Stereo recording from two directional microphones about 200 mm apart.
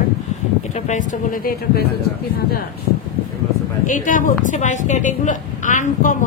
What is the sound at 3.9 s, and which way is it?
A woman's voice, 40° left (ahead or behind).